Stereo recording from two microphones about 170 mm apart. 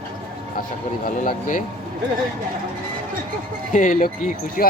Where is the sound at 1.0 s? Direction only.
50° left (ahead or behind).